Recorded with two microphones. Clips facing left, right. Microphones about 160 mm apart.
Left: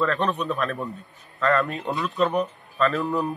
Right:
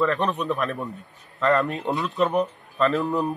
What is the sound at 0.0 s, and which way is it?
A man's voice, 20° right (ahead or behind).